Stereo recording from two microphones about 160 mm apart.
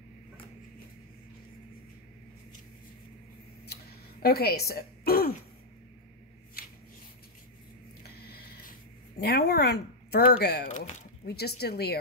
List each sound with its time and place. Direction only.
3.6 s throat clearing: 75° left (ahead or behind)
6.6 s shuffling cards: 70° left (ahead or behind)
8.0 s a sound: 80° left
9.2 s speech: 80° left